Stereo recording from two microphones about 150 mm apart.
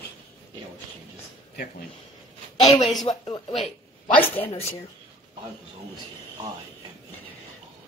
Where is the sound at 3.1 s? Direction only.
30° left (ahead or behind).